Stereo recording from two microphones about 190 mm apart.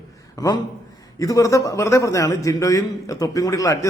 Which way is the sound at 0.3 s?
20° left (ahead or behind).